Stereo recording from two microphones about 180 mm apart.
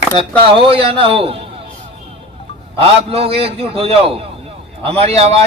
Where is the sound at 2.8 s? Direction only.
35° right (ahead or behind).